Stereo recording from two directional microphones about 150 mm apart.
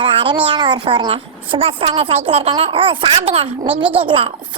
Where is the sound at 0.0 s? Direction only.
35° right (ahead or behind).